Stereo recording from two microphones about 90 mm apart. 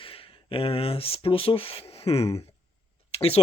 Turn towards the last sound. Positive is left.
turn(degrees=90)